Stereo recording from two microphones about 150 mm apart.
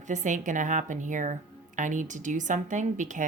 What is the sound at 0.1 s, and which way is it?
Speech, 55° right (ahead or behind).